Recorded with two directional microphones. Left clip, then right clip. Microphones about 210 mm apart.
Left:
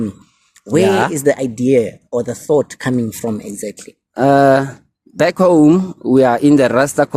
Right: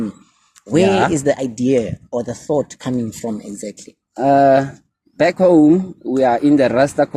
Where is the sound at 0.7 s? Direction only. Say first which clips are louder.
Left 1 dB; 20° left (ahead or behind).